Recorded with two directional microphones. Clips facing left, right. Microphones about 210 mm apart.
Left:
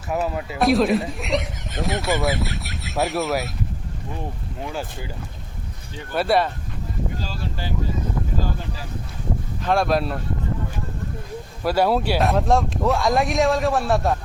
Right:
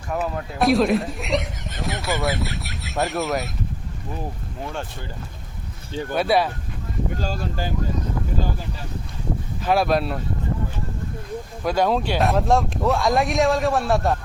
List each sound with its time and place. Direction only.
0.3 s speech: centre (ahead or behind)
4.6 s speech: 5° left (ahead or behind)
6.1 s speech: centre (ahead or behind)
7.2 s speech: 45° right (ahead or behind)
9.6 s speech: 5° right (ahead or behind)
11.6 s speech: 5° left (ahead or behind)